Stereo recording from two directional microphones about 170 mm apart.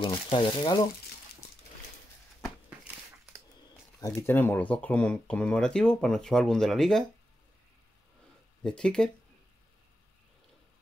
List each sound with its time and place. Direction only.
0.0 s speech: 30° left (ahead or behind)
4.0 s speech: 15° left (ahead or behind)
8.6 s speech: 5° left (ahead or behind)